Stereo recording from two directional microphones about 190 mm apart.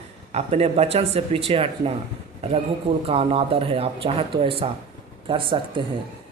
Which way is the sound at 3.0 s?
30° right (ahead or behind).